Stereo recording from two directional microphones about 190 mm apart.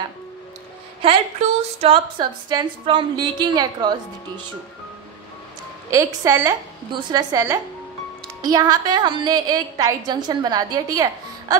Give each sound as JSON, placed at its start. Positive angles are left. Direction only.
{"t": 1.0, "sound": "a woman's voice", "side_deg": -35}
{"t": 5.9, "sound": "a woman's voice", "side_deg": -15}